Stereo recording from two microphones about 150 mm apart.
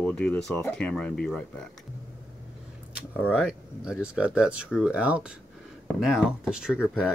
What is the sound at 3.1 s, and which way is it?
Speech, 10° right (ahead or behind).